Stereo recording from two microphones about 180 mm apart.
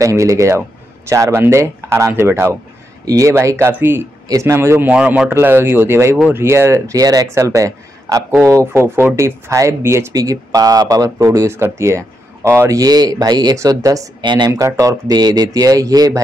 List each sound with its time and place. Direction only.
0.0 s a man's voice: 15° right (ahead or behind)